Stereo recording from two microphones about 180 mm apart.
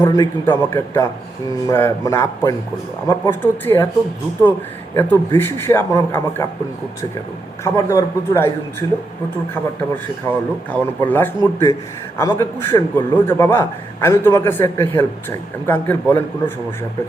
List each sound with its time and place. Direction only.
0.0 s a man's voice: 20° left (ahead or behind)
0.4 s a man's voice: 10° left (ahead or behind)
7.6 s a man's voice: 15° left (ahead or behind)
10.7 s a man's voice: 10° left (ahead or behind)